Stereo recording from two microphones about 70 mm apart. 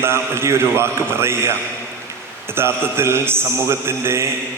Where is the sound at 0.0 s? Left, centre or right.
Right.